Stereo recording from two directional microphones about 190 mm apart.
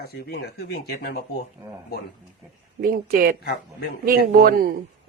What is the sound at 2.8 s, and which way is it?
Speech, 50° right (ahead or behind).